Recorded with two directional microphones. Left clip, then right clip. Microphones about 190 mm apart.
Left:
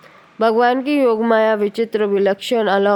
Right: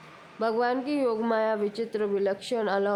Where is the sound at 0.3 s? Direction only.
35° left (ahead or behind).